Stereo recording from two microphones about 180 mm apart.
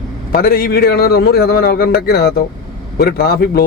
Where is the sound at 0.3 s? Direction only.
55° left (ahead or behind).